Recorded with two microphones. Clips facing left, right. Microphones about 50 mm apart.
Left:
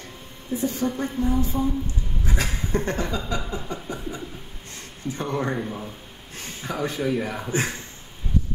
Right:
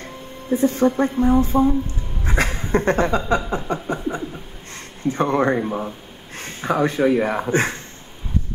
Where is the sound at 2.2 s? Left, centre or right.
Right.